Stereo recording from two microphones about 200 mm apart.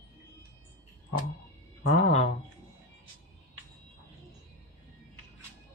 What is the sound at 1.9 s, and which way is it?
Speech, 35° left (ahead or behind).